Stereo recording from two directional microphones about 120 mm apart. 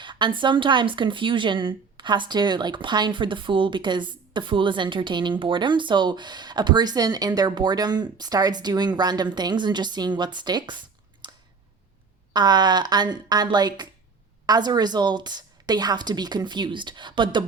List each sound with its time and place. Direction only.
0.0 s a woman's voice: 40° right (ahead or behind)
11.2 s a sound: 40° right (ahead or behind)
12.3 s a woman's voice: 35° right (ahead or behind)